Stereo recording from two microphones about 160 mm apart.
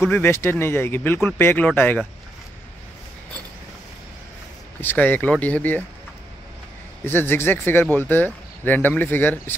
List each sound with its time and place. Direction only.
0.1 s speech: 15° left (ahead or behind)
4.8 s speech: 10° left (ahead or behind)
7.1 s speech: 15° left (ahead or behind)